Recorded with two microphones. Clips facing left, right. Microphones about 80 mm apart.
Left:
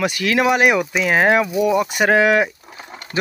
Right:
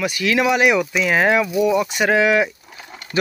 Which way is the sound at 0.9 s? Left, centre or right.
Left.